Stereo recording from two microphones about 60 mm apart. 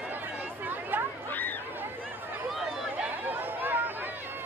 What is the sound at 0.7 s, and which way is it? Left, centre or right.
Chatter, right.